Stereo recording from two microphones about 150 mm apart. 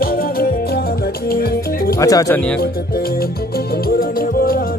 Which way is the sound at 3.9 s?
80° left.